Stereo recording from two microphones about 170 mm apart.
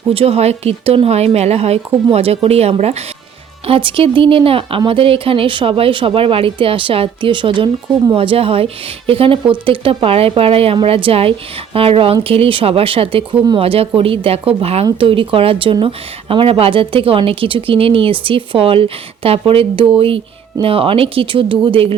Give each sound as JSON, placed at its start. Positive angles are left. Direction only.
{"t": 0.1, "sound": "speech", "side_deg": -35}